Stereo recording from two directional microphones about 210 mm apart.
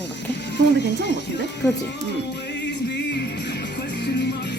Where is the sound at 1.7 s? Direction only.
55° left (ahead or behind).